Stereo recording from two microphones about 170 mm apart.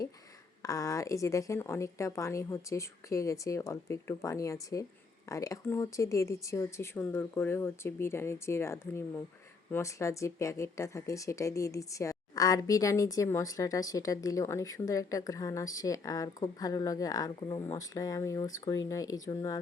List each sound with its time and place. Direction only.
0.6 s a woman's voice: 20° left (ahead or behind)